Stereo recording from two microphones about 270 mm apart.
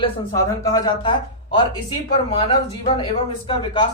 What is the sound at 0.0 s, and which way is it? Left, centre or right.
Speech, centre.